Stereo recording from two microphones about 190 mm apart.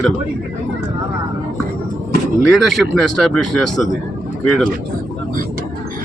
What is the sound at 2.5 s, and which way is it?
Speech, centre (ahead or behind).